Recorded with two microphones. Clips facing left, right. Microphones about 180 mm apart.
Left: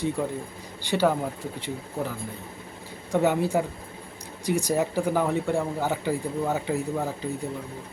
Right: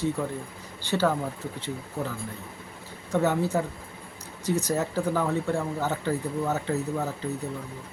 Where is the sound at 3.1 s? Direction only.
15° left (ahead or behind).